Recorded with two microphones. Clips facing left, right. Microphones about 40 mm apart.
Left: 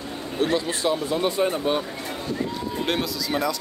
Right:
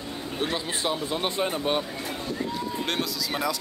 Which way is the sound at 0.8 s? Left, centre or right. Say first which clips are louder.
Left 4 dB; right.